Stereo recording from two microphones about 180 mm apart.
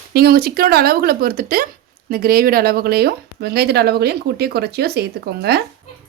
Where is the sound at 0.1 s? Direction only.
60° right (ahead or behind).